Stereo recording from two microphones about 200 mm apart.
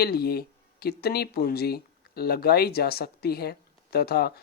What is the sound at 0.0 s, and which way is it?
Speech, 50° left (ahead or behind).